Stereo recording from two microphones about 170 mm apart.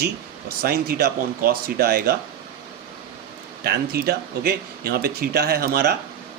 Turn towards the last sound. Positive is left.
turn(degrees=-65)  # may be behind; listen again after turning